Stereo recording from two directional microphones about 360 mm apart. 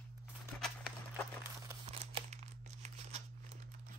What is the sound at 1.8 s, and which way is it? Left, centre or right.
Crumpling, centre.